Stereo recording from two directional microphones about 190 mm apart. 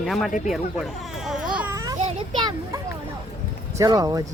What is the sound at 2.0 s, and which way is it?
Children playing, 30° right (ahead or behind).